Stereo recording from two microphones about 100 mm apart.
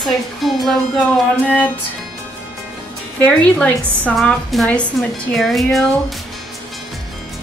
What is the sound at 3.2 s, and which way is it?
Speech, 15° left (ahead or behind).